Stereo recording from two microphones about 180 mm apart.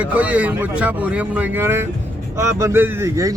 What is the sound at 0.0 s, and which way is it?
A man's voice, 10° right (ahead or behind).